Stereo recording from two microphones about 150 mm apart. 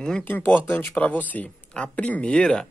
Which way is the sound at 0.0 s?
10° left (ahead or behind).